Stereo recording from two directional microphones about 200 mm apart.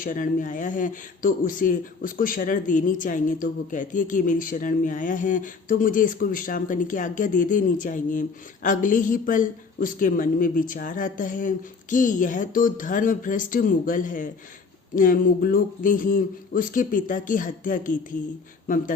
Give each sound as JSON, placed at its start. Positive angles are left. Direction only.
{"t": 0.0, "sound": "speech", "side_deg": 40}